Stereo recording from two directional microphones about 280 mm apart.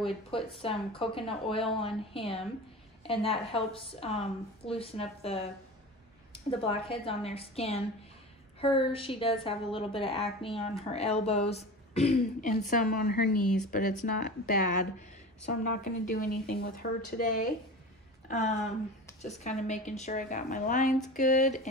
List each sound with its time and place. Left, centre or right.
0.0 s a woman's voice: centre
15.7 s a woman's voice: left
19.2 s a woman's voice: left